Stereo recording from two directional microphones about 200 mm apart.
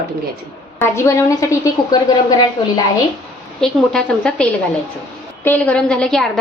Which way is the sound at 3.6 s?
5° left (ahead or behind).